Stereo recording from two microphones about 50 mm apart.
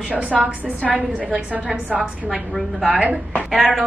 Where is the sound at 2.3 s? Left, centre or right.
Centre.